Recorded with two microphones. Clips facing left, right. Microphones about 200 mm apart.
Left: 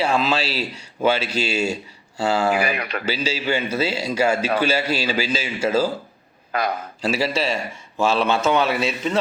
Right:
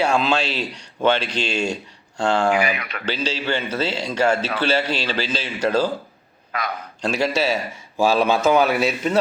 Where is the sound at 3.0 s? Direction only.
10° left (ahead or behind).